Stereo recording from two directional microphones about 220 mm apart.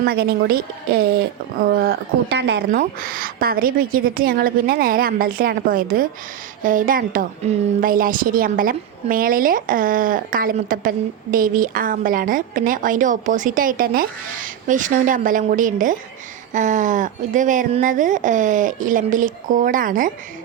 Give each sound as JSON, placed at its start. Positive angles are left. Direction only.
{"t": 0.0, "sound": "a woman's voice", "side_deg": -45}